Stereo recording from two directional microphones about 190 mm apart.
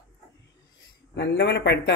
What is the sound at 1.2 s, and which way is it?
Speech, 65° left (ahead or behind).